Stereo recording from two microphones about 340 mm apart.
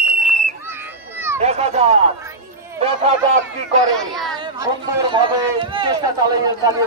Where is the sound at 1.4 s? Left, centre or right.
Centre.